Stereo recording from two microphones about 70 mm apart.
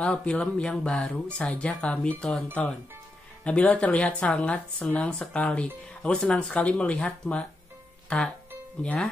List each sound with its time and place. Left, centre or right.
0.0 s speech: centre